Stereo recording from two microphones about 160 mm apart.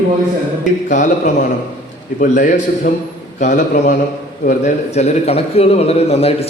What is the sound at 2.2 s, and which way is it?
A man's voice, 50° left (ahead or behind).